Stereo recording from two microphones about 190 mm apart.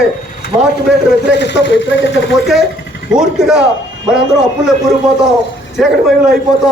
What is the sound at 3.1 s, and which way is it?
Speech, 5° right (ahead or behind).